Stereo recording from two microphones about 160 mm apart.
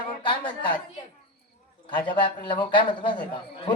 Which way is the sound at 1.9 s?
30° left (ahead or behind).